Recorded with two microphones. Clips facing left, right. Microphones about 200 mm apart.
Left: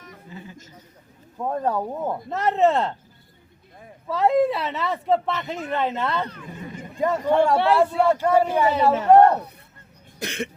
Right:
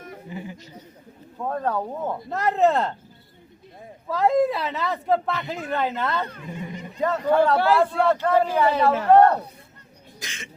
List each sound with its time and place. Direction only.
0.3 s a man's voice: 15° right (ahead or behind)
1.4 s a man's voice: 15° left (ahead or behind)
2.1 s speech: centre (ahead or behind)
4.1 s speech: centre (ahead or behind)
6.4 s a sound: 50° left (ahead or behind)
7.0 s a man's voice: 10° left (ahead or behind)
10.2 s cough: 60° left (ahead or behind)